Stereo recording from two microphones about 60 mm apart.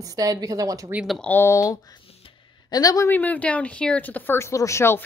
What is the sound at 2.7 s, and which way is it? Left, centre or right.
Speech, left.